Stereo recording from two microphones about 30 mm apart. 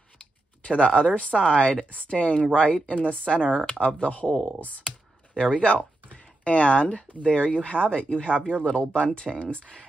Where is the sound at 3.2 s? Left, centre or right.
Left.